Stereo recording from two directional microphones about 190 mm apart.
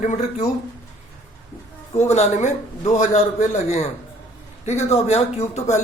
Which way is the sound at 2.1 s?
35° left (ahead or behind).